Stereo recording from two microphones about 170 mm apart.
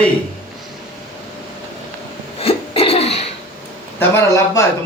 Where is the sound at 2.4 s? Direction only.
35° left (ahead or behind).